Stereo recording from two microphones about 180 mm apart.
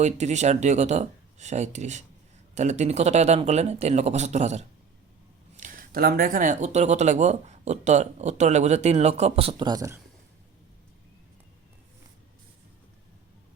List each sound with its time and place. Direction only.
0.0 s speech: 40° right (ahead or behind); by 10.0 s 20° right (ahead or behind)